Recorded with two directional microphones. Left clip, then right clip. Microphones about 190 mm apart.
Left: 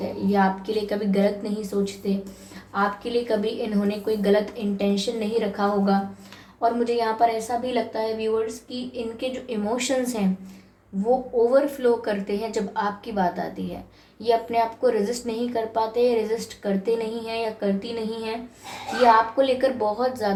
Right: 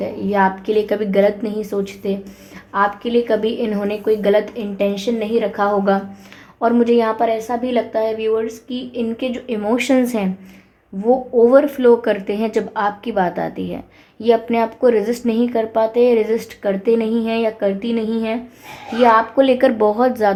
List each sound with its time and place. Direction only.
0.0 s a woman's voice: 50° right (ahead or behind)
11.4 s a woman's voice: 45° right (ahead or behind)